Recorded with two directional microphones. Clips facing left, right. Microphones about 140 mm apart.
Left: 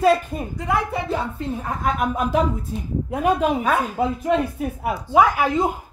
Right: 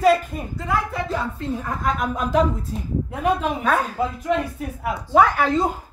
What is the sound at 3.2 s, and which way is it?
Speech, 10° left (ahead or behind).